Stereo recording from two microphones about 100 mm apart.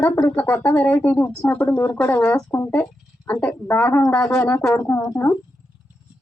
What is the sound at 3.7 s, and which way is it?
Speech, 25° left (ahead or behind).